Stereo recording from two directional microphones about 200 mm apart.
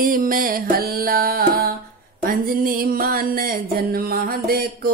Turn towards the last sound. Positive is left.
turn(degrees=-50)  # may be behind; listen again after turning